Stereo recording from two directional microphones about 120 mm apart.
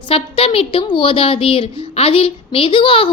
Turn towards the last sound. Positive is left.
turn(degrees=45)  # may be behind; listen again after turning